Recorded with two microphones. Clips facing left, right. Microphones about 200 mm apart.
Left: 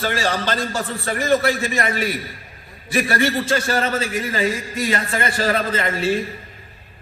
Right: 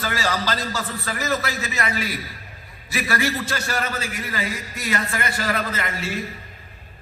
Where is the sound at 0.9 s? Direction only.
30° left (ahead or behind).